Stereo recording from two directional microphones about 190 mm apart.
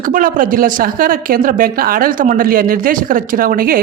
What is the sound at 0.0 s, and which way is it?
Speech, 45° right (ahead or behind).